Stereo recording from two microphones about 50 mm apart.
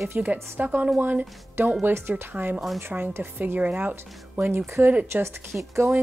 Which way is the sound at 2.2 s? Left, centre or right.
Right.